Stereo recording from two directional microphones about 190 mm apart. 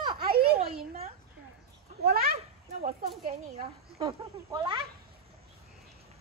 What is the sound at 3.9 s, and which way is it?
Speech, 25° right (ahead or behind).